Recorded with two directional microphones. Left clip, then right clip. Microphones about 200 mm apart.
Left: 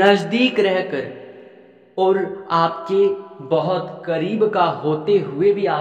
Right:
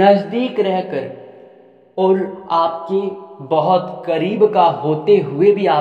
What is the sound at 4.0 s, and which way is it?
Speech, 10° right (ahead or behind).